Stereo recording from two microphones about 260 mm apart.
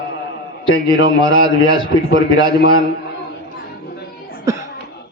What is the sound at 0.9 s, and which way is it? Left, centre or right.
A man's voice, centre.